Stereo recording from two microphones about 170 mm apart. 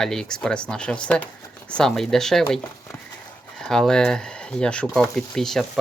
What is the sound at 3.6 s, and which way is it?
Speech, 5° left (ahead or behind).